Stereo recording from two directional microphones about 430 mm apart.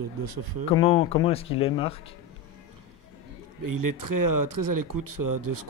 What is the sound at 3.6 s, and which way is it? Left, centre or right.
Speech, right.